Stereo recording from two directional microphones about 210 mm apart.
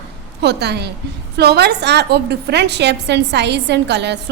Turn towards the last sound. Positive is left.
turn(degrees=-55)  # may be behind; listen again after turning